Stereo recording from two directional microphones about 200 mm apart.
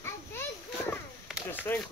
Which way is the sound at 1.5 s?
10° left (ahead or behind).